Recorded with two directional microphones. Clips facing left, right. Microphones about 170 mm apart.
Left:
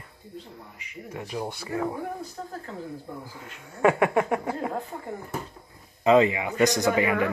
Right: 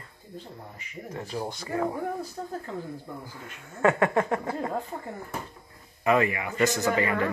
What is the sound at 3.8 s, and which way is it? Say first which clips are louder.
Speech: left 1 dB; 10° left (ahead or behind).